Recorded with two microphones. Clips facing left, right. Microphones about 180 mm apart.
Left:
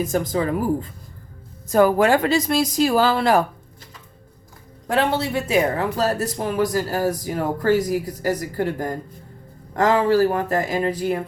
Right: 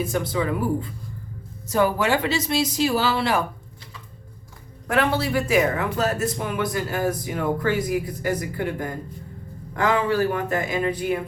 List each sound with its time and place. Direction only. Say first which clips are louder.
0.0 s speech: left 3 dB; 45° left (ahead or behind)
4.9 s speech: left 1 dB; 25° left (ahead or behind)